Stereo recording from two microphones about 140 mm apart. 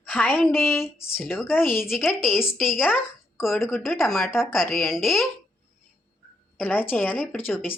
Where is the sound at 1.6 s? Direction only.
5° right (ahead or behind).